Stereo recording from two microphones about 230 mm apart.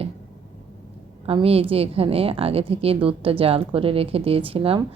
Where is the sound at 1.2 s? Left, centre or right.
Right.